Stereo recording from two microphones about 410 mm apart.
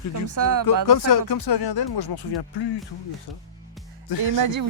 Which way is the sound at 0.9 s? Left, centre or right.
Left.